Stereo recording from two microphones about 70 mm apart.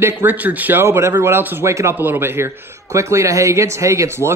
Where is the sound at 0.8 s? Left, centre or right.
Right.